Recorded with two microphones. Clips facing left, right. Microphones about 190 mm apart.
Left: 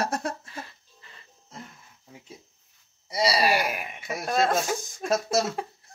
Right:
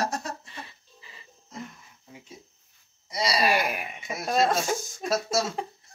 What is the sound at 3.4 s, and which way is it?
Speech, centre (ahead or behind).